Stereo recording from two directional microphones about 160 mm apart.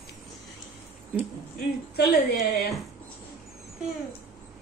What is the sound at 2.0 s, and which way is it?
Speech, 90° left.